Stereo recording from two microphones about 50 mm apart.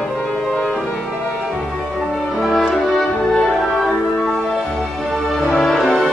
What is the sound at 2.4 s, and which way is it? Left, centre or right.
Music, centre.